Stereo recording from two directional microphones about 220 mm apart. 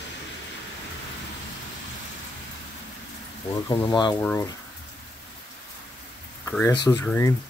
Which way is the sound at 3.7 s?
20° left (ahead or behind).